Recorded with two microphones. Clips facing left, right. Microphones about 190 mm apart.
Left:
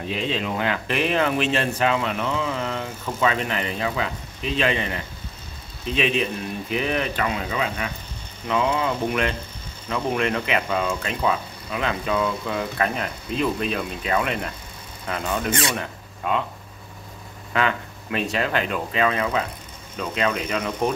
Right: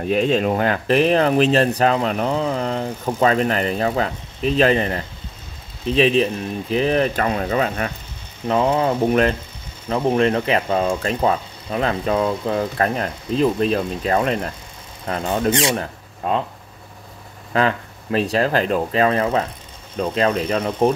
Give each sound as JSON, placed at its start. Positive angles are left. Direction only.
{"t": 0.1, "sound": "speech", "side_deg": -50}
{"t": 17.5, "sound": "speech", "side_deg": -35}